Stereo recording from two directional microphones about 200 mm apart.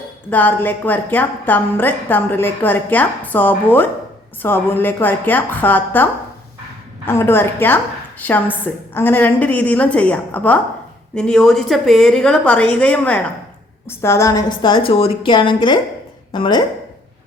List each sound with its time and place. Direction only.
0.3 s a woman's voice: 10° left (ahead or behind)